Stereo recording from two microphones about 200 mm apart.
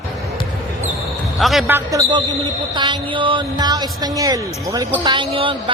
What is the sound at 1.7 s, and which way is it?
A man's voice, 15° right (ahead or behind).